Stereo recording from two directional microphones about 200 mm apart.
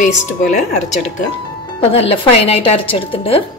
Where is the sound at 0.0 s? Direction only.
40° left (ahead or behind).